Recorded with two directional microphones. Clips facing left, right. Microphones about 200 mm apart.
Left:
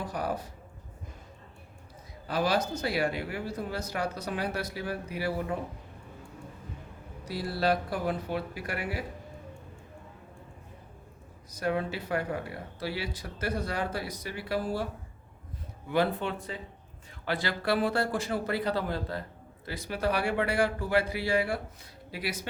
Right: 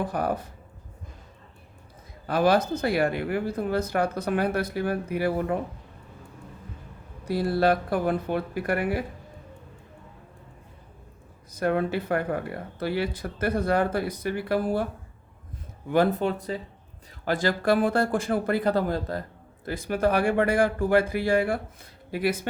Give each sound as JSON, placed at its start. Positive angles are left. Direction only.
{"t": 0.0, "sound": "speech", "side_deg": -55}
{"t": 2.2, "sound": "speech", "side_deg": -55}
{"t": 7.3, "sound": "speech", "side_deg": -55}
{"t": 11.5, "sound": "speech", "side_deg": -55}
{"t": 15.9, "sound": "speech", "side_deg": -45}